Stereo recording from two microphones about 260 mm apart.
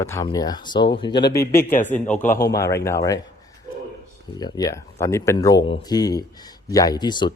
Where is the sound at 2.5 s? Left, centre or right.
Centre.